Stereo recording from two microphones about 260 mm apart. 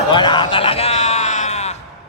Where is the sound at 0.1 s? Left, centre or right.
Centre.